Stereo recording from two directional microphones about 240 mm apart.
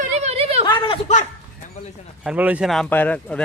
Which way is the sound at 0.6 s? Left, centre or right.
Centre.